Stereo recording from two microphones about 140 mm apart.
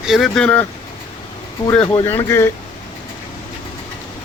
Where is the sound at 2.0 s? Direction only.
20° left (ahead or behind).